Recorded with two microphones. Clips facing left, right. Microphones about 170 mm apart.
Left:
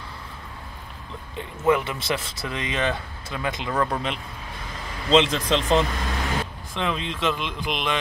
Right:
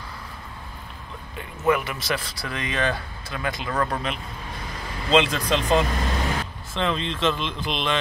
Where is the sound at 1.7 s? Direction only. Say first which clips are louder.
Left 1 dB; 25° left (ahead or behind).